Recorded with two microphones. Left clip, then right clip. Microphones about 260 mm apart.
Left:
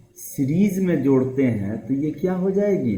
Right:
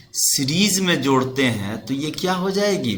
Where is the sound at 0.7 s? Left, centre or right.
Right.